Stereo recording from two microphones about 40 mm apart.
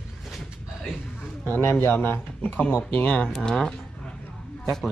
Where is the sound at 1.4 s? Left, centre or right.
Left.